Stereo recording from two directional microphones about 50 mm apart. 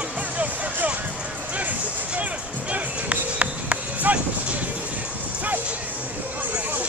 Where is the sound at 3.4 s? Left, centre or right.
Right.